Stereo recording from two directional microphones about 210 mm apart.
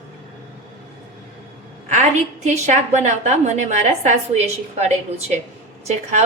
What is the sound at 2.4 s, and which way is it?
A woman's voice, 35° right (ahead or behind).